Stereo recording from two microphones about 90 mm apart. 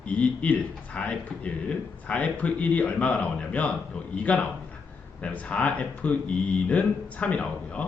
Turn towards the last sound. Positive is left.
turn(degrees=15)  # may be behind; listen again after turning